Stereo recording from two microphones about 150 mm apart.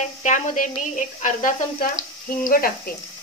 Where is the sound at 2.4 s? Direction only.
70° left (ahead or behind).